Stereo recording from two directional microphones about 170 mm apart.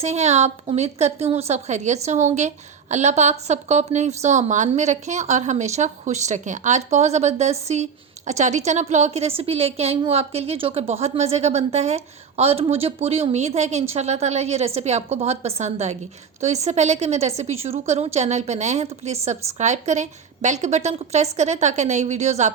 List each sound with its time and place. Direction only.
0.0 s a woman's voice: 40° right (ahead or behind)